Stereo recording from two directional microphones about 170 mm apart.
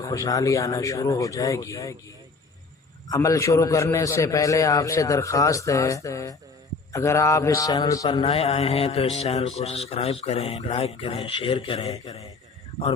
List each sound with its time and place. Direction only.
0.0 s a man's voice: 20° left (ahead or behind)
3.1 s a man's voice: 20° left (ahead or behind); by 11.9 s 35° left (ahead or behind)